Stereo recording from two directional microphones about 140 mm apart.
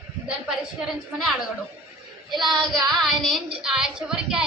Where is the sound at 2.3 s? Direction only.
30° right (ahead or behind).